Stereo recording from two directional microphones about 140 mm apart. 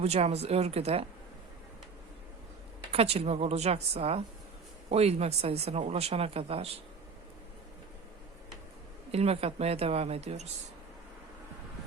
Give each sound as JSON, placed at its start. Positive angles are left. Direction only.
{"t": 0.0, "sound": "speech", "side_deg": -50}
{"t": 2.9, "sound": "speech", "side_deg": -45}
{"t": 9.1, "sound": "speech", "side_deg": -45}